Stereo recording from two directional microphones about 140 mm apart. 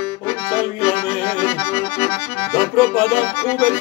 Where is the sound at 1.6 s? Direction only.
15° left (ahead or behind).